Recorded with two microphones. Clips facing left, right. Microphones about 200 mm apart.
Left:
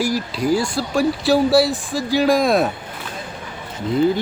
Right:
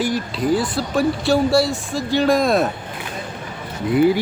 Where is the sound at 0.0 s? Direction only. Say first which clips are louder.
Even; centre (ahead or behind).